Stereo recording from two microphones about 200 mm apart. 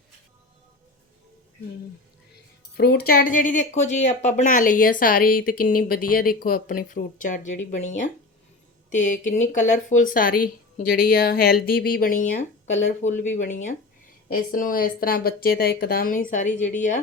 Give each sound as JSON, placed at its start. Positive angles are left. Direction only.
{"t": 2.7, "sound": "speech", "side_deg": 55}